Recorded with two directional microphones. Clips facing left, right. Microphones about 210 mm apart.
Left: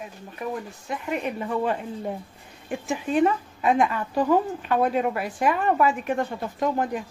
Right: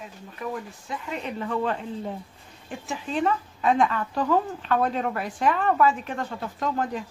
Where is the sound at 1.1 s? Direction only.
15° left (ahead or behind).